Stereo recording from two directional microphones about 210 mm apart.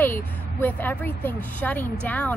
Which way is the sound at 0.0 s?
10° left (ahead or behind).